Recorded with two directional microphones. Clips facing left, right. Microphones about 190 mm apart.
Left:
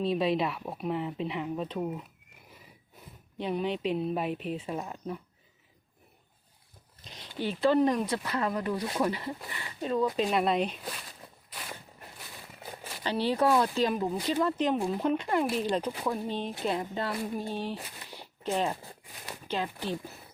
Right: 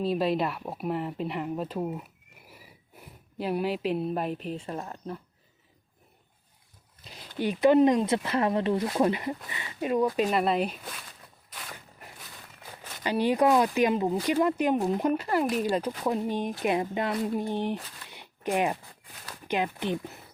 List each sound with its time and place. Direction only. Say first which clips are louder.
0.0 s speech: right 1 dB; centre (ahead or behind)
3.3 s speech: right 2 dB; 5° right (ahead or behind)
7.0 s a sound: right 1 dB; 5° right (ahead or behind)
7.3 s speech: right 4 dB; 15° right (ahead or behind)
10.2 s speech: right 2 dB; 5° right (ahead or behind)
11.5 s a sound: left 1 dB; 10° left (ahead or behind)
13.0 s speech: right 3 dB; 10° right (ahead or behind)
18.1 s zipper: right 3 dB; 15° right (ahead or behind)
19.5 s speech: right 4 dB; 15° right (ahead or behind)